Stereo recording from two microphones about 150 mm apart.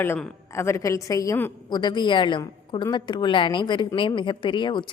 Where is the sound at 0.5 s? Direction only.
20° left (ahead or behind).